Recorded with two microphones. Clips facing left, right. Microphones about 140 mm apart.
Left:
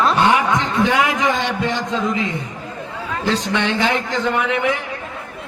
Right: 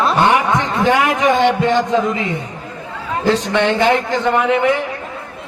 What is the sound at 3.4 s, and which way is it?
Speech, 20° right (ahead or behind).